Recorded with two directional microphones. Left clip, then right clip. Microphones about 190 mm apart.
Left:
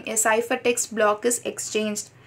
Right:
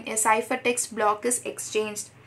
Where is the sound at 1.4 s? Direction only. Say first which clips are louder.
Left 2 dB; 40° left (ahead or behind).